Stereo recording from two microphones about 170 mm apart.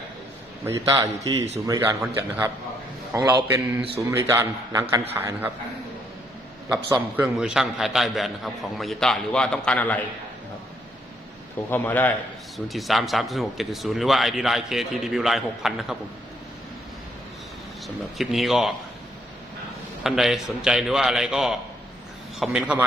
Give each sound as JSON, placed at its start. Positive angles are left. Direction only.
{"t": 0.6, "sound": "a man's voice", "side_deg": -15}
{"t": 6.7, "sound": "speech", "side_deg": -10}
{"t": 11.7, "sound": "a man's voice", "side_deg": 10}
{"t": 12.5, "sound": "speech", "side_deg": 0}
{"t": 17.8, "sound": "speech", "side_deg": 0}
{"t": 20.1, "sound": "speech", "side_deg": 0}